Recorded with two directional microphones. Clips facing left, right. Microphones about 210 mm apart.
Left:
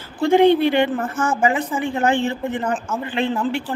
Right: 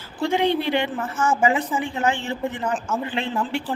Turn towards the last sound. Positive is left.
turn(degrees=0)  # may be behind; listen again after turning